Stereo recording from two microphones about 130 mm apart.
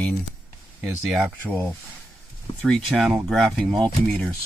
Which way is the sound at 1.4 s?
10° left (ahead or behind).